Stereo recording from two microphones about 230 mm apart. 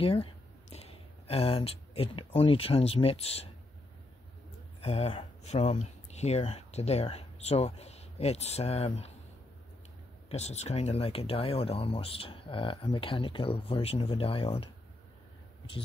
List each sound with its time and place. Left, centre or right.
0.0 s speech: left
4.8 s speech: left
10.3 s speech: left